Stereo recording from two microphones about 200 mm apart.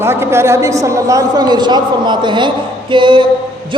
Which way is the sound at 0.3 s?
15° right (ahead or behind).